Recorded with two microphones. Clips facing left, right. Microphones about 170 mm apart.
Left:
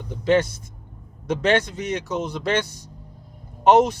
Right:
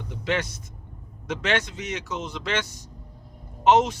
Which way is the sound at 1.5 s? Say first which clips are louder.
Left 6 dB; 35° left (ahead or behind).